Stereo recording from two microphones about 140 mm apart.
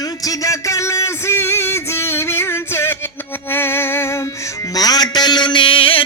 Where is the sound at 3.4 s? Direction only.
15° left (ahead or behind).